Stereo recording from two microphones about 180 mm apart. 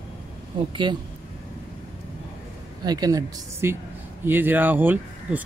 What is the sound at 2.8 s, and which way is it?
Speech, 20° right (ahead or behind).